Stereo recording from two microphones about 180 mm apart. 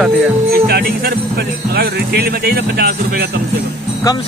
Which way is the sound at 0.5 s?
60° right (ahead or behind).